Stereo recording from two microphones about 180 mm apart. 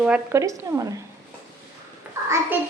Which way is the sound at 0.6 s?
20° right (ahead or behind).